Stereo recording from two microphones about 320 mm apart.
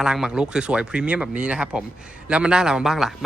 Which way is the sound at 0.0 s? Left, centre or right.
Centre.